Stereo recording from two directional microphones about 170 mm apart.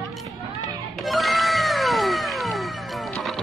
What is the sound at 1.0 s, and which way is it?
Music, centre (ahead or behind).